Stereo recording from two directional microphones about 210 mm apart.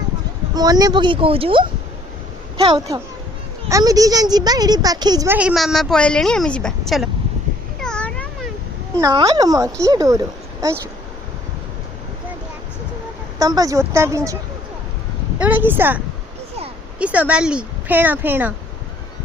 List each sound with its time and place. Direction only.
0.5 s speech: 20° right (ahead or behind); by 7.1 s centre (ahead or behind)
7.8 s cat: 5° left (ahead or behind)
9.0 s speech: 15° right (ahead or behind)
13.4 s speech: 15° right (ahead or behind)
15.4 s speech: 10° right (ahead or behind)
17.0 s speech: 5° right (ahead or behind)